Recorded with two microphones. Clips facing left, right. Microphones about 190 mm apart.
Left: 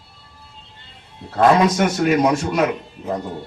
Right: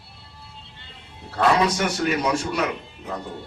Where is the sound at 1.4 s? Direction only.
50° left (ahead or behind).